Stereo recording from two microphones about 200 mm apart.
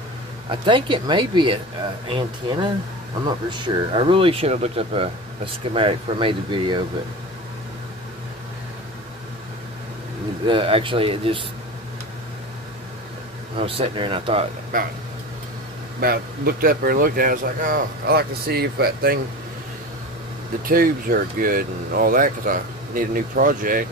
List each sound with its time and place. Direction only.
0.5 s speech: 25° right (ahead or behind)
10.4 s speech: 25° right (ahead or behind)
13.6 s speech: 30° right (ahead or behind)
14.7 s speech: 45° right (ahead or behind)
16.0 s speech: 50° right (ahead or behind)
20.6 s speech: 45° right (ahead or behind)